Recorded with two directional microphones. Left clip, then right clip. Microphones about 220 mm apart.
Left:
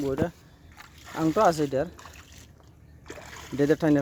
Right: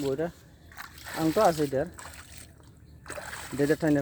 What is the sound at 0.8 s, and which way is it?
Slosh, 40° right (ahead or behind).